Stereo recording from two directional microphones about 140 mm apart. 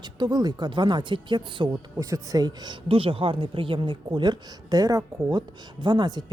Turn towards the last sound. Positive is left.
turn(degrees=-30)  # may be behind; listen again after turning